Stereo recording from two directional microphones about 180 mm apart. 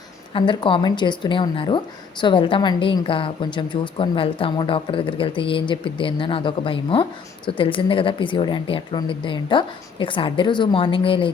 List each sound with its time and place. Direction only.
0.3 s speech: 25° left (ahead or behind)